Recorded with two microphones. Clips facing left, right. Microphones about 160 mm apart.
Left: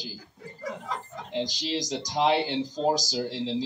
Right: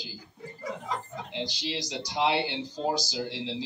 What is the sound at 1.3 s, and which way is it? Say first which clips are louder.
A man's voice: left 5 dB; 45° left (ahead or behind).